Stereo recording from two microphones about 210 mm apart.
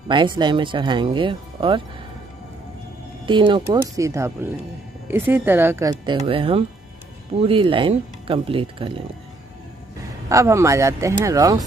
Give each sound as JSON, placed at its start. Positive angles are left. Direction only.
{"t": 0.1, "sound": "speech", "side_deg": -20}
{"t": 3.3, "sound": "speech", "side_deg": -25}
{"t": 10.3, "sound": "speech", "side_deg": -15}